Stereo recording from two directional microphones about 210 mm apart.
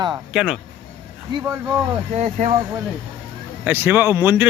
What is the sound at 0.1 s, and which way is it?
Speech, 5° right (ahead or behind).